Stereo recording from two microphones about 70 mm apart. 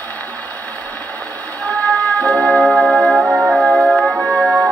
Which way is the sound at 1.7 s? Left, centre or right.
Left.